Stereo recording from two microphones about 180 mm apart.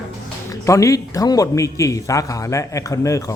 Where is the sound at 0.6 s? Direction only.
15° left (ahead or behind).